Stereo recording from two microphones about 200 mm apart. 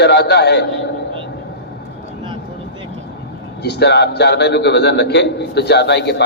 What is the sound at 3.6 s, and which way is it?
A man's voice, 55° left (ahead or behind).